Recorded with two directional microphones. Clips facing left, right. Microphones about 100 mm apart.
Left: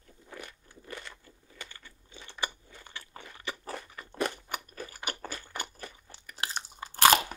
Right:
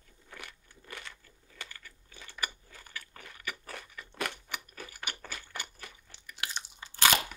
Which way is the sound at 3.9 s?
40° left (ahead or behind).